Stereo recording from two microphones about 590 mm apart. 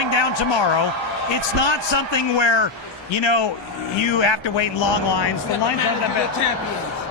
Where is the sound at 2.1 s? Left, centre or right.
Left.